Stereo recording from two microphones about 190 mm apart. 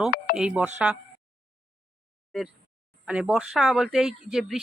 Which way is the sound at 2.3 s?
Centre (ahead or behind).